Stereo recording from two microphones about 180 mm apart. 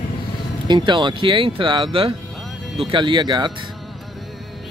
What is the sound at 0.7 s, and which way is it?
A man's voice, 25° right (ahead or behind).